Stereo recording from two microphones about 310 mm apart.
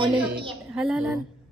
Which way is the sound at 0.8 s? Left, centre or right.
Centre.